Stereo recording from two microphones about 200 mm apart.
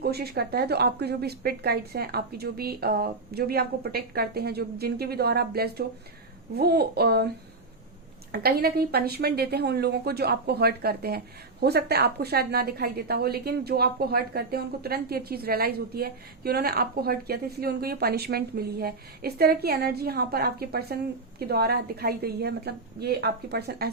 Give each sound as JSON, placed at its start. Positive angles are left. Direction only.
{"t": 0.0, "sound": "a woman's voice", "side_deg": -50}
{"t": 8.3, "sound": "a woman's voice", "side_deg": -50}